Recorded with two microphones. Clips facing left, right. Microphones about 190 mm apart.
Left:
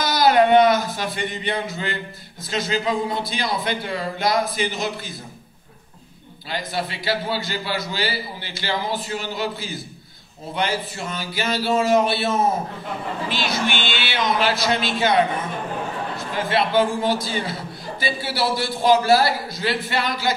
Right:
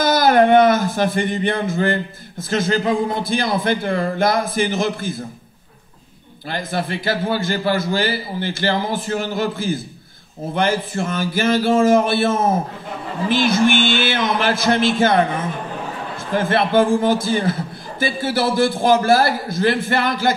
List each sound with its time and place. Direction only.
0.0 s a man's voice: 50° right (ahead or behind)
6.5 s a man's voice: 50° right (ahead or behind)
16.3 s a man's voice: 50° right (ahead or behind)